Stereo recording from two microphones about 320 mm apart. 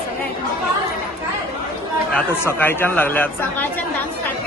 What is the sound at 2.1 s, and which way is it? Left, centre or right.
Speech, centre.